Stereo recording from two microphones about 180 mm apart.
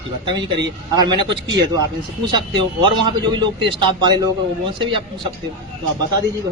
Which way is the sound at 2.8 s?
25° right (ahead or behind).